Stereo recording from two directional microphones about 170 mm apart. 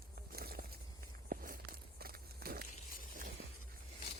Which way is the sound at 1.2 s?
55° right (ahead or behind).